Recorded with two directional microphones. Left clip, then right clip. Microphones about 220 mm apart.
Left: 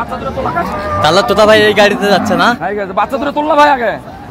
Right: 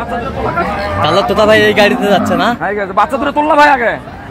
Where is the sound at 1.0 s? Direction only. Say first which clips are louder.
Left 2 dB; 10° left (ahead or behind).